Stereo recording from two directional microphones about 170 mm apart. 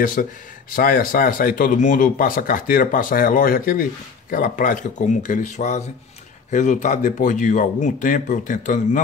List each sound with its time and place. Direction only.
0.0 s speech: 55° left (ahead or behind)